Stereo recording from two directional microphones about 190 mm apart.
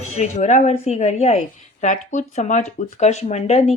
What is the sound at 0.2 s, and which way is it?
Speech, 40° left (ahead or behind).